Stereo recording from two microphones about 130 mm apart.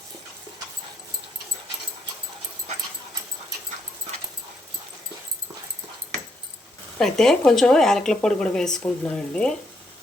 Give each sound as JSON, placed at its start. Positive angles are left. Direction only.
{"t": 7.0, "sound": "speech", "side_deg": 5}